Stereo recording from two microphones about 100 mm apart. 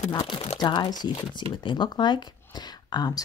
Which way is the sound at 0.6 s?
45° left (ahead or behind).